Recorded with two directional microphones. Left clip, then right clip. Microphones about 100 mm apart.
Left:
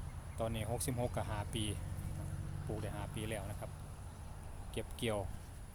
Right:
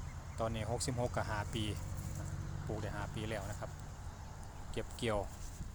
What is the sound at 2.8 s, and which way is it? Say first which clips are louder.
Speech: right 2 dB; 5° left (ahead or behind).